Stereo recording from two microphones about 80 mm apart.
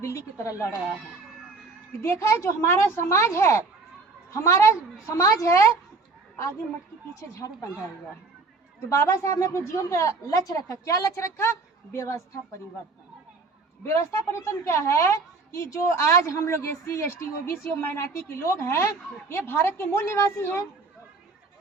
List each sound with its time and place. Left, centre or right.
0.0 s a woman's voice: left
2.0 s a woman's voice: left
8.9 s a woman's voice: left
13.8 s a woman's voice: left
17.7 s a woman's voice: left